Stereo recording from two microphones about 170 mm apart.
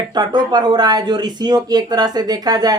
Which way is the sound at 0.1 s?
25° right (ahead or behind).